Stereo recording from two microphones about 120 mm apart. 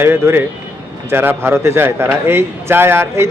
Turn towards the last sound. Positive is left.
turn(degrees=-20)  # may be behind; listen again after turning